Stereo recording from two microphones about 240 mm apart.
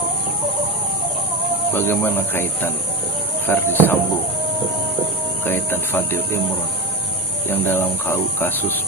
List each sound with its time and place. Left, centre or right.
1.7 s speech: centre
5.5 s speech: centre
7.7 s speech: centre